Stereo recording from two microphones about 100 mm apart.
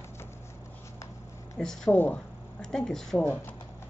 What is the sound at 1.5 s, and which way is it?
Speech, 5° left (ahead or behind).